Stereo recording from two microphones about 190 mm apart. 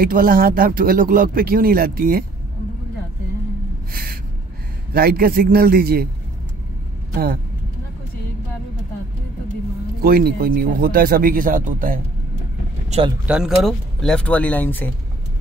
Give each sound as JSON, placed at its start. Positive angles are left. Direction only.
{"t": 0.0, "sound": "speech", "side_deg": -50}
{"t": 3.9, "sound": "gasp", "side_deg": -50}
{"t": 4.9, "sound": "speech", "side_deg": -50}
{"t": 10.0, "sound": "speech", "side_deg": -50}
{"t": 13.3, "sound": "speech", "side_deg": 0}